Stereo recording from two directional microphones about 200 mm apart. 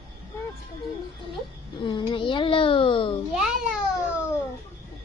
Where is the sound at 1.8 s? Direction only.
25° left (ahead or behind).